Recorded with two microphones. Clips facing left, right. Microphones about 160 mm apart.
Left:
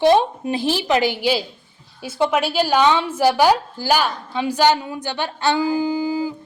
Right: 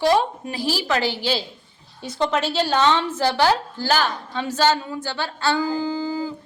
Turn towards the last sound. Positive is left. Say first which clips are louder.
# left 4 dB
turn(degrees=15)  # may be behind; listen again after turning